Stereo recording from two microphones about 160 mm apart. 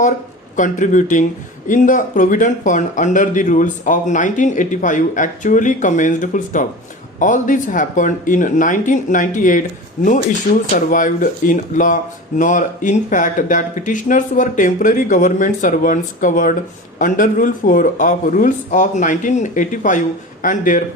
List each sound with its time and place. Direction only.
0.5 s speech: 50° left (ahead or behind)